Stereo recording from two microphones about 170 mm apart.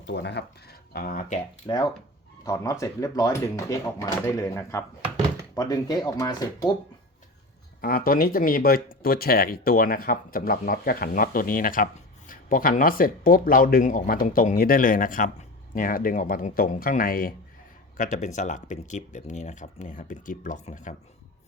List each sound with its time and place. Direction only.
0.1 s speech: 80° left; by 1.4 s 55° left (ahead or behind)
1.6 s speech: 25° left (ahead or behind)
7.8 s speech: 60° left (ahead or behind)